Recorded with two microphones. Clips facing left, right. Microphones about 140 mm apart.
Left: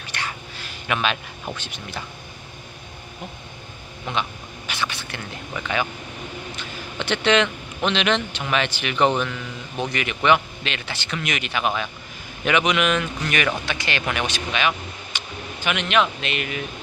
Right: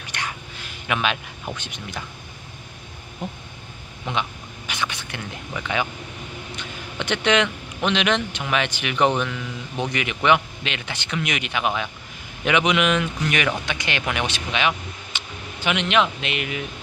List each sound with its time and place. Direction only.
0.0 s a sound: 15° right (ahead or behind)
0.9 s speech: 10° right (ahead or behind)
4.0 s speech: 15° right (ahead or behind)